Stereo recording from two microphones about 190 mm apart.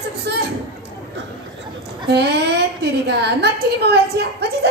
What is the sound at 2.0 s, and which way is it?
A woman's voice, 60° right (ahead or behind).